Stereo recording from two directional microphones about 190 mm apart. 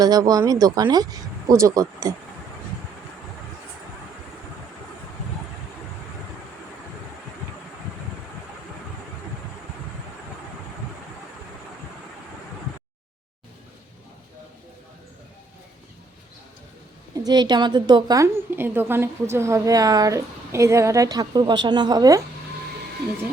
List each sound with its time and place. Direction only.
0.0 s a woman's voice: 20° right (ahead or behind)
17.2 s a woman's voice: 20° right (ahead or behind)